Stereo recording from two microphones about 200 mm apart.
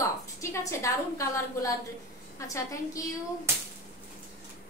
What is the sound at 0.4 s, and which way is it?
A woman's voice, 15° left (ahead or behind).